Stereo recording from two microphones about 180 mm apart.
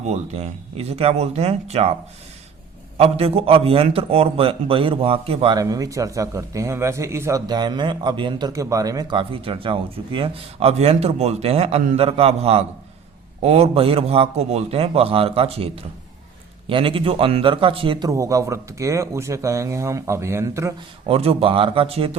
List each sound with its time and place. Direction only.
0.0 s a man's voice: 35° right (ahead or behind)
3.0 s a man's voice: 35° right (ahead or behind)
5.5 s a man's voice: 20° right (ahead or behind)
18.1 s speech: 20° right (ahead or behind)
21.1 s a man's voice: 30° right (ahead or behind)